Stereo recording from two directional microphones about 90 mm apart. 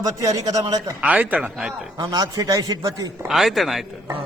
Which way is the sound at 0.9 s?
15° right (ahead or behind).